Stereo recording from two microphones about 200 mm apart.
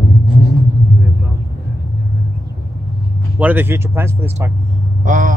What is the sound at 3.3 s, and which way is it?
Speech, 10° right (ahead or behind).